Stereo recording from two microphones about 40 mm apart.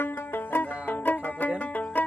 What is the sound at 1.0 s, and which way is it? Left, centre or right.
Music, left.